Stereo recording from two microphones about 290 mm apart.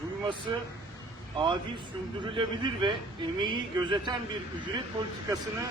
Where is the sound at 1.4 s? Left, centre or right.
Centre.